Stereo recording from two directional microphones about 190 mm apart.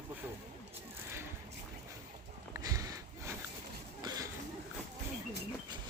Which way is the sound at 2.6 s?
20° right (ahead or behind).